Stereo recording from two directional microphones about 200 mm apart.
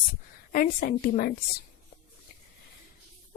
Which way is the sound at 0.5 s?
45° left (ahead or behind).